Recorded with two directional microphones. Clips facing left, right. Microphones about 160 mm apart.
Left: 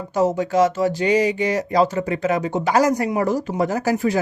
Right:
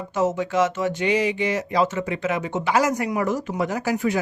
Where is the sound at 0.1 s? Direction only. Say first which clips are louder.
Left 3 dB; 35° left (ahead or behind).